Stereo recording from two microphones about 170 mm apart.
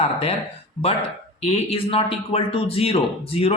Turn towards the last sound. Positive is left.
turn(degrees=35)  # may be behind; listen again after turning